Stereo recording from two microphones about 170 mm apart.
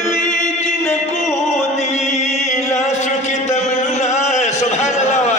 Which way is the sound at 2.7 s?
45° left (ahead or behind).